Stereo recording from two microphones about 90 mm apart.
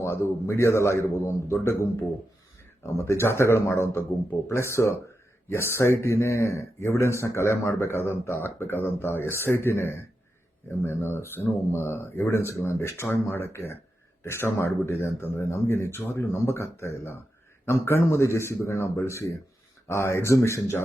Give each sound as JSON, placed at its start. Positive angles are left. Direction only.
{"t": 0.0, "sound": "a man's voice", "side_deg": 30}
{"t": 2.8, "sound": "a man's voice", "side_deg": 30}